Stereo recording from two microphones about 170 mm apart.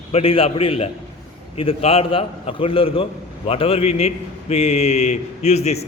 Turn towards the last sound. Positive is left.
turn(degrees=40)  # may be behind; listen again after turning